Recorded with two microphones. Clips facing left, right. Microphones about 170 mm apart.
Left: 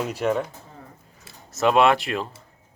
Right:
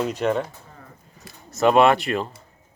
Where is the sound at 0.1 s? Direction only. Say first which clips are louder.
Right 1 dB; 10° left (ahead or behind).